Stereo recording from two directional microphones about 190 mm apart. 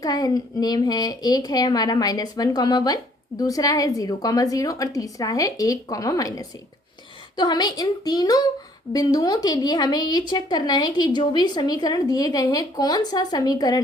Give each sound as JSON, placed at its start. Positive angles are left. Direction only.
{"t": 0.0, "sound": "a woman's voice", "side_deg": 20}